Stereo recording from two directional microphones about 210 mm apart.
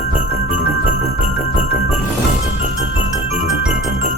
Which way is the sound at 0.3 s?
30° right (ahead or behind).